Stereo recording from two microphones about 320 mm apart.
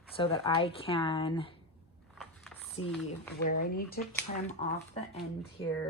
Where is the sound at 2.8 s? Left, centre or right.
Left.